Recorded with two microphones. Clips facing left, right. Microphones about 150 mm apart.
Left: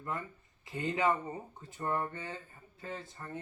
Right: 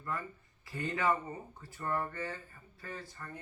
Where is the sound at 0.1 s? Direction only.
20° left (ahead or behind).